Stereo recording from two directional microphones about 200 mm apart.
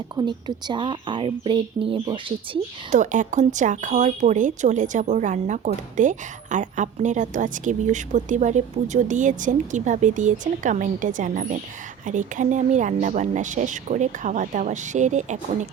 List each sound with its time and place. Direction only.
0.2 s speech: 20° right (ahead or behind)
2.9 s speech: 40° right (ahead or behind)